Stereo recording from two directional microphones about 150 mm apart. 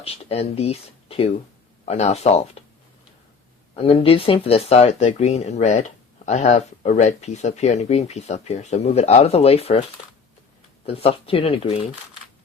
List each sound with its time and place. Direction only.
0.0 s speech: 45° left (ahead or behind)
3.8 s speech: 40° left (ahead or behind)
10.8 s speech: 40° left (ahead or behind)